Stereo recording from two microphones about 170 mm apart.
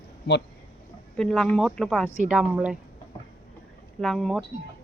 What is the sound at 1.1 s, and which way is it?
Speech, 5° left (ahead or behind).